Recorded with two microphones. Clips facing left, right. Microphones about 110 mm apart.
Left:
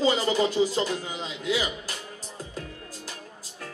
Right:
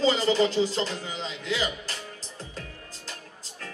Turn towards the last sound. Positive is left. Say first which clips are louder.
# left 3 dB
turn(degrees=10)  # may be behind; listen again after turning